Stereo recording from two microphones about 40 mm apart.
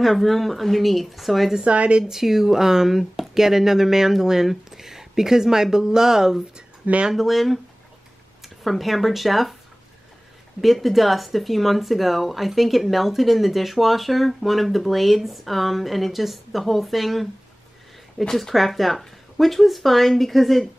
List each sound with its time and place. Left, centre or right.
0.0 s speech: centre
1.6 s a woman's voice: right
2.0 s speech: centre
6.8 s speech: right
7.2 s speech: centre
8.6 s speech: centre
10.6 s speech: centre